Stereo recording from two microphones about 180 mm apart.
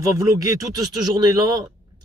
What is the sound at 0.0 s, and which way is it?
Speech, 20° right (ahead or behind).